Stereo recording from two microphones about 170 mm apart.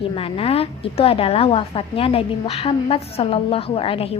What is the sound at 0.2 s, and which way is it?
A woman's voice, 35° left (ahead or behind).